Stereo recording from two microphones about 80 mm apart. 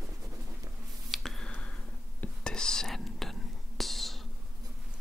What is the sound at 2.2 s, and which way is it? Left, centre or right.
Whispering, centre.